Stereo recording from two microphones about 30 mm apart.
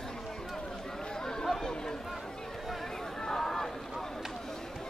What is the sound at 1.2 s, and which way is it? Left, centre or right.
Chatter, left.